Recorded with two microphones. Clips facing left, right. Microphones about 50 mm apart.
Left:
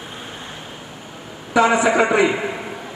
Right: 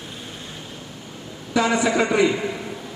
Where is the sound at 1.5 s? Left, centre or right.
Left.